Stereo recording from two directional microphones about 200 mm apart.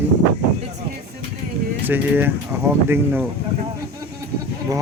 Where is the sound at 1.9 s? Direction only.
10° right (ahead or behind).